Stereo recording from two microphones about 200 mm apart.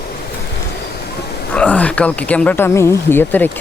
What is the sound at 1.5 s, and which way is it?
Speech, 5° left (ahead or behind).